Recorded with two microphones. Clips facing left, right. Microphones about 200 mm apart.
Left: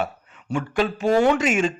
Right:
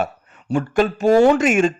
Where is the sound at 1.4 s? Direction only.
50° right (ahead or behind).